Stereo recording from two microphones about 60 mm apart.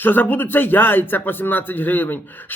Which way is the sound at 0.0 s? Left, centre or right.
Left.